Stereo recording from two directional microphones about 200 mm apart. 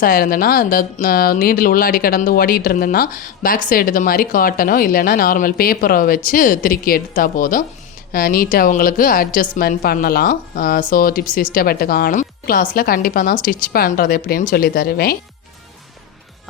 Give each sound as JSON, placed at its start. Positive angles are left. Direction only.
{"t": 0.0, "sound": "speech", "side_deg": 45}